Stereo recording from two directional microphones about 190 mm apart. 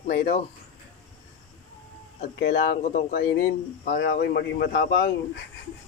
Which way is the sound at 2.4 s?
50° left (ahead or behind).